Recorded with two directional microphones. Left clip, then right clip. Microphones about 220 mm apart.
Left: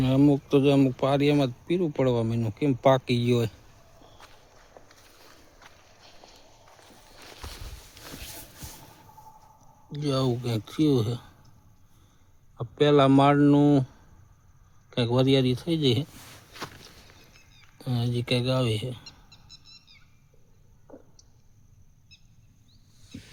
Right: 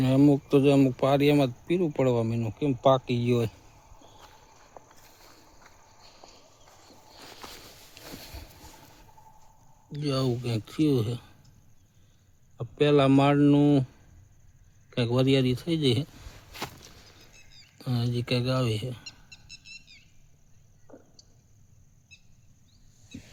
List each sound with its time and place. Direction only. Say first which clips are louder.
0.0 s speech: even; centre (ahead or behind)
4.8 s boat: right 3 dB; centre (ahead or behind)
6.2 s walk: right 1 dB; centre (ahead or behind)
9.9 s speech: left 2 dB; centre (ahead or behind)
12.5 s speech: left 2 dB; centre (ahead or behind)
14.8 s speech: left 2 dB; centre (ahead or behind)
17.7 s speech: left 1 dB; centre (ahead or behind)
19.0 s a sound: right 3 dB; 50° right (ahead or behind)